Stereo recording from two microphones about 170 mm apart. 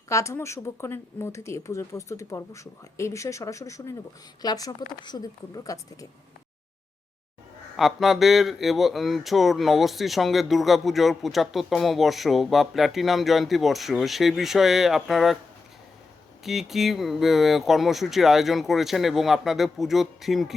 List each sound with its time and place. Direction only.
0.1 s a woman's voice: 15° left (ahead or behind)
7.8 s speech: centre (ahead or behind)
16.4 s speech: centre (ahead or behind)